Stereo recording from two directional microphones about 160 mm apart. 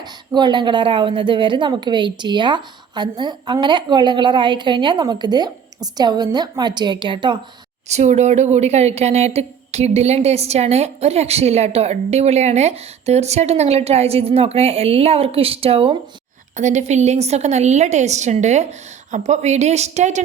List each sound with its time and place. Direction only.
0.0 s a woman's voice: 25° right (ahead or behind)
7.9 s a woman's voice: 45° right (ahead or behind)
16.6 s a woman's voice: 45° right (ahead or behind)